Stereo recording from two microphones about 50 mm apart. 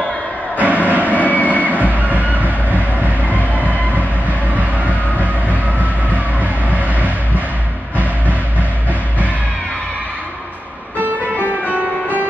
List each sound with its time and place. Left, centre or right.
0.6 s music: right
1.1 s a sound: left
1.7 s train: right
5.2 s music: right
6.4 s vehicle: right
11.6 s music: right